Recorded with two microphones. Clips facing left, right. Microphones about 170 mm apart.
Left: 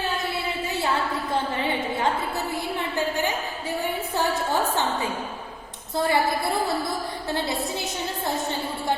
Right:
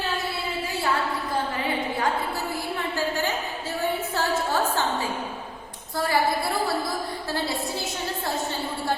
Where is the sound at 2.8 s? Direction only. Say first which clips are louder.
Left 1 dB; 20° left (ahead or behind).